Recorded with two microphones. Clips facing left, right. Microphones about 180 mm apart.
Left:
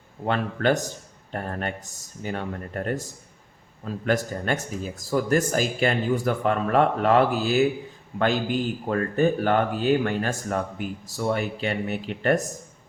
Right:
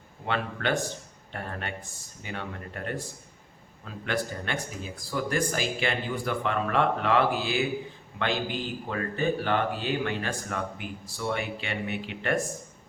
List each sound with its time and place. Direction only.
0.3 s a man's voice: 40° left (ahead or behind)